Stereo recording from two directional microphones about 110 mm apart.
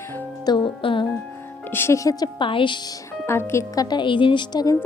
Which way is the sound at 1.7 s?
25° left (ahead or behind).